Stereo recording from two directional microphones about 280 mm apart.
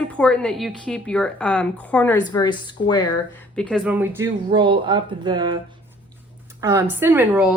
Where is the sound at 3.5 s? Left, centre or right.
Centre.